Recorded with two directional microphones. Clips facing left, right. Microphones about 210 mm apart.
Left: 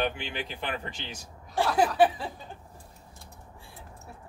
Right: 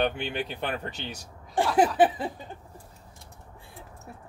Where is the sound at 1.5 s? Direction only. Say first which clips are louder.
Right 2 dB; 15° right (ahead or behind).